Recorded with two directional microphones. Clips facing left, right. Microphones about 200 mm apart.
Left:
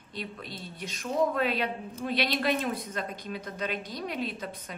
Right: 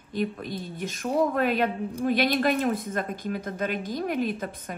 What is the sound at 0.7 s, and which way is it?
A woman's voice, 50° right (ahead or behind).